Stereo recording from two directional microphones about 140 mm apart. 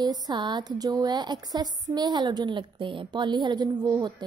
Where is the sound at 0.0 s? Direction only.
30° right (ahead or behind).